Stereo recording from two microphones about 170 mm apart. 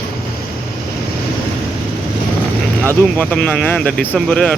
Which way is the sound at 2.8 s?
10° left (ahead or behind).